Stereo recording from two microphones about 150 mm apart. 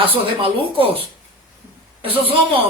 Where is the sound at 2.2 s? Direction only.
40° right (ahead or behind).